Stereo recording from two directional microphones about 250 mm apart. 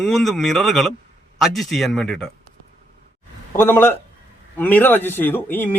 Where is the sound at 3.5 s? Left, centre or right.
Centre.